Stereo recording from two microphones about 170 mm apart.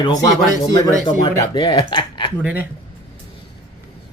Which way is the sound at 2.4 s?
10° right (ahead or behind).